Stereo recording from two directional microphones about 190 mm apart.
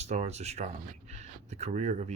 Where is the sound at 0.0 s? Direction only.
35° right (ahead or behind).